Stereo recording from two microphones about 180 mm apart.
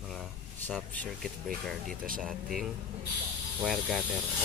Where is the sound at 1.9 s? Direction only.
50° right (ahead or behind).